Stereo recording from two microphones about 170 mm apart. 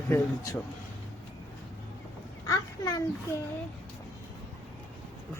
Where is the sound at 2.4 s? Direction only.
20° left (ahead or behind).